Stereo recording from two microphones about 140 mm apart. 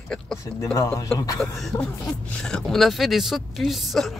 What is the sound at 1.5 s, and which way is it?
Speech, 5° left (ahead or behind).